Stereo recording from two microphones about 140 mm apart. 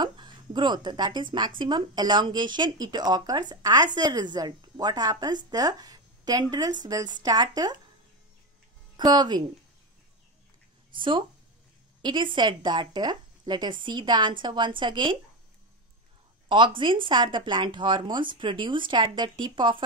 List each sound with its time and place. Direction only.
0.0 s speech: 30° right (ahead or behind)
8.9 s speech: 30° right (ahead or behind)
11.0 s speech: 35° right (ahead or behind)
16.4 s speech: 35° right (ahead or behind)